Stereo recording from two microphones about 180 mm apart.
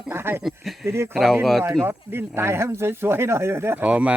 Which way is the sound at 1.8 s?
10° right (ahead or behind).